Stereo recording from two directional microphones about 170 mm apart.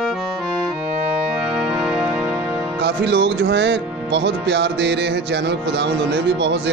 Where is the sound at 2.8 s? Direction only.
75° right (ahead or behind).